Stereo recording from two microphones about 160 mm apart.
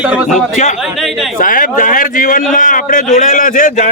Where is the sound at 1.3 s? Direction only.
55° left (ahead or behind).